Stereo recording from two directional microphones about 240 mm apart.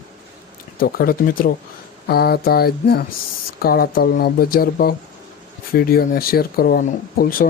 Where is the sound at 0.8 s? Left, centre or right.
Left.